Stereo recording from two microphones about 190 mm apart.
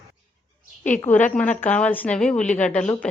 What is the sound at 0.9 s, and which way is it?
A woman's voice, 10° left (ahead or behind).